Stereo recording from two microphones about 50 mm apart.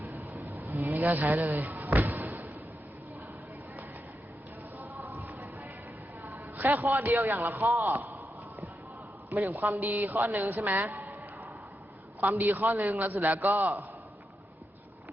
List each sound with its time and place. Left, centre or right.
0.0 s vehicle: right
0.9 s a sound: right
4.8 s a sound: right
6.6 s a man's voice: right
9.4 s a man's voice: right
12.2 s a man's voice: right